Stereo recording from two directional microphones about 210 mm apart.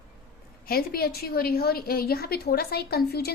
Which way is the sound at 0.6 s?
45° left (ahead or behind).